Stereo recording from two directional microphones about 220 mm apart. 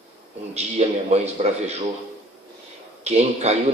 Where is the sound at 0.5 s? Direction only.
30° right (ahead or behind).